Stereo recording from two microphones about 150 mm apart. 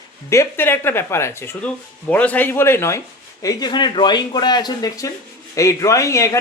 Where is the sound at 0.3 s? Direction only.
15° left (ahead or behind).